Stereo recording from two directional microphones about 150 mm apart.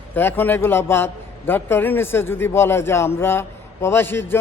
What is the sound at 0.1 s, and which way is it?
A man's voice, 15° left (ahead or behind).